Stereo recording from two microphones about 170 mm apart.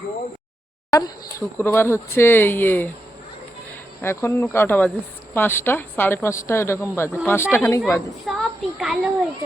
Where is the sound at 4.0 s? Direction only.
15° left (ahead or behind).